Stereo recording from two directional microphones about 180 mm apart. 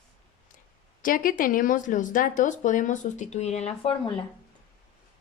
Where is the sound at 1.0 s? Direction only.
50° left (ahead or behind); by 4.1 s 30° left (ahead or behind).